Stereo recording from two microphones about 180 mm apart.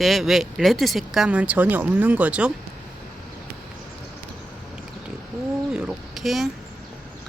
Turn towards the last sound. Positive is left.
turn(degrees=0)  # may be behind; listen again after turning